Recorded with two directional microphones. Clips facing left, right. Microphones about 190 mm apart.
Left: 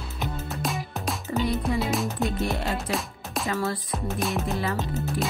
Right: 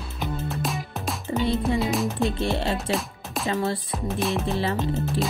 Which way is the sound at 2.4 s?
30° right (ahead or behind).